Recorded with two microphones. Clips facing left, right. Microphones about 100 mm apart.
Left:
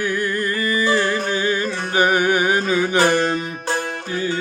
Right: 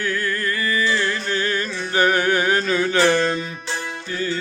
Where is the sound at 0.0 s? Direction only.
20° left (ahead or behind).